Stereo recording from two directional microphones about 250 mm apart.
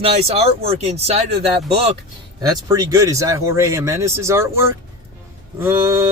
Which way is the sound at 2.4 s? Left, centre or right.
Centre.